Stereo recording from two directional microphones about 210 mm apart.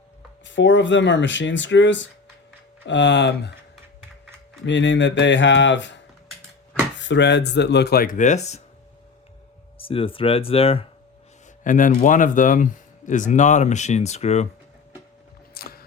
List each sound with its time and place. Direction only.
0.4 s speech: 60° left (ahead or behind)
4.6 s speech: 60° left (ahead or behind)
7.0 s speech: 60° left (ahead or behind); by 8.6 s 30° left (ahead or behind)
9.7 s speech: 25° left (ahead or behind)
11.6 s speech: 40° left (ahead or behind)
15.6 s a sound: 45° left (ahead or behind)